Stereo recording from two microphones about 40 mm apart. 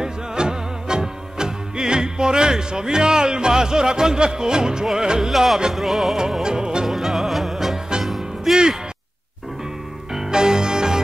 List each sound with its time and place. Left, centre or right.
0.0 s music: centre
5.3 s music: centre
6.4 s music: centre
6.9 s music: centre
10.1 s music: centre